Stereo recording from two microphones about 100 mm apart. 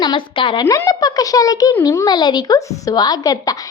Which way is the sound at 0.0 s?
55° left (ahead or behind).